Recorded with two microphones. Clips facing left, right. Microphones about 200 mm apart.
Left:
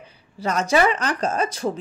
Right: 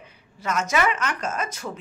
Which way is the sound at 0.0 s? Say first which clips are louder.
Left 5 dB; 35° left (ahead or behind).